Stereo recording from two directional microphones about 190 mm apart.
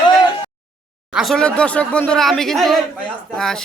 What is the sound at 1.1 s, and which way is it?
A man's voice, centre (ahead or behind).